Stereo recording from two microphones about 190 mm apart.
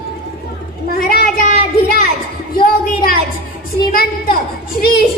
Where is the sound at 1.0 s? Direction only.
50° left (ahead or behind).